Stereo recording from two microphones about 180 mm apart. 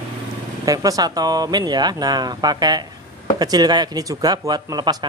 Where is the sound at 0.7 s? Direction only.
20° right (ahead or behind).